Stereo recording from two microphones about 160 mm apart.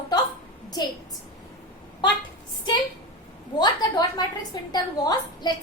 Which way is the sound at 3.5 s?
25° left (ahead or behind).